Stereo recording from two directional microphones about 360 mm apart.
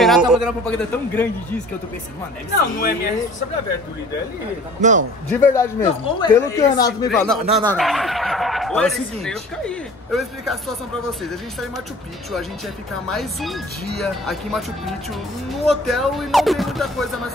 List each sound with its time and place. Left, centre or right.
0.0 s speech: centre
2.8 s speech: left
5.4 s speech: centre
13.1 s speech: centre